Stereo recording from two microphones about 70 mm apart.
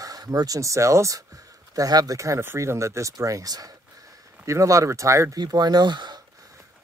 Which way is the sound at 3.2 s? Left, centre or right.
Right.